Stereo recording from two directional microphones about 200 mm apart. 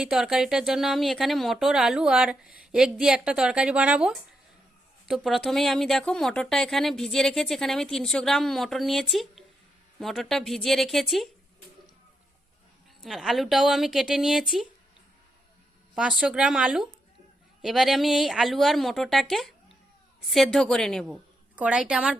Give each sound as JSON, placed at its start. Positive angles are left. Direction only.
{"t": 0.0, "sound": "speech", "side_deg": 0}
{"t": 13.0, "sound": "speech", "side_deg": 0}
{"t": 16.0, "sound": "speech", "side_deg": -5}